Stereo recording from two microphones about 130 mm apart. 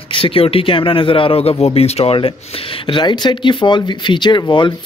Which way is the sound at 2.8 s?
35° left (ahead or behind).